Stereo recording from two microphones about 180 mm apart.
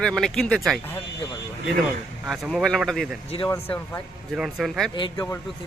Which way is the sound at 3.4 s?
10° left (ahead or behind).